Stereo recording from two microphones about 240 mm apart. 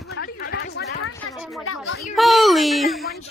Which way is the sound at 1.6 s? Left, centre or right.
Left.